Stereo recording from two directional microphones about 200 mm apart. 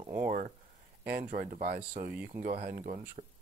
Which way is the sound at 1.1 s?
45° right (ahead or behind).